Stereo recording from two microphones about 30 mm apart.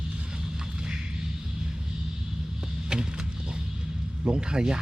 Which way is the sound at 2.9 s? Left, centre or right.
Right.